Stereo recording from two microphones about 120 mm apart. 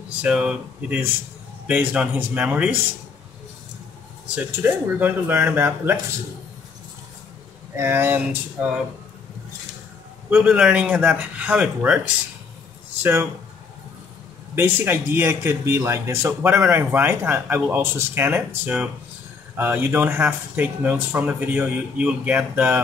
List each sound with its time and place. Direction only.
0.2 s speech: 10° right (ahead or behind)
4.5 s speech: 15° right (ahead or behind)
7.7 s speech: 20° right (ahead or behind)
10.3 s speech: 10° right (ahead or behind)
13.0 s speech: 20° right (ahead or behind)
14.5 s speech: 20° right (ahead or behind)